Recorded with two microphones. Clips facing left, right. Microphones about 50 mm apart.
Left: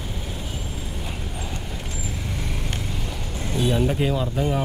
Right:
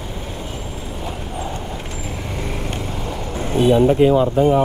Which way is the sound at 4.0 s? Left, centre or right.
Right.